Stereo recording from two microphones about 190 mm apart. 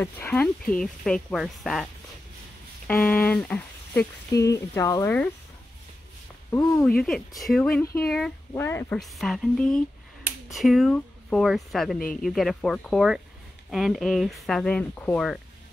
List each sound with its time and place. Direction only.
0.0 s speech: 10° left (ahead or behind)
2.9 s speech: 10° left (ahead or behind)
6.5 s speech: 15° left (ahead or behind)
7.0 s speech: centre (ahead or behind)
8.6 s speech: 15° left (ahead or behind)
9.0 s speech: centre (ahead or behind)